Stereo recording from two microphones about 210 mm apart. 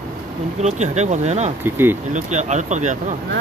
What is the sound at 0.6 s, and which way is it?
Speech, 35° right (ahead or behind).